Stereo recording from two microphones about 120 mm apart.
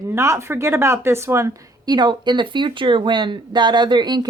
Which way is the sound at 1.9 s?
40° right (ahead or behind).